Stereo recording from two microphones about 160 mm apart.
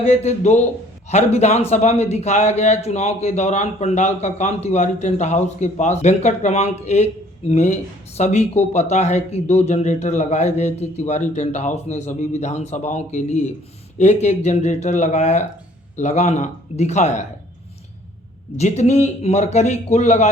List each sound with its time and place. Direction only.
0.0 s a man's voice: 45° left (ahead or behind)
18.5 s a man's voice: 45° left (ahead or behind)